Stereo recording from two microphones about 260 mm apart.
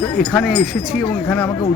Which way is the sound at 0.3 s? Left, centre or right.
Centre.